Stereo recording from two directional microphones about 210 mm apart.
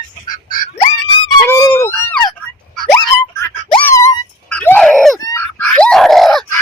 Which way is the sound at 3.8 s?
10° left (ahead or behind).